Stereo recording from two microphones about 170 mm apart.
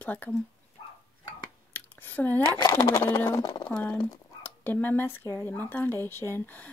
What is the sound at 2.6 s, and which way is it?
Speech, 20° left (ahead or behind).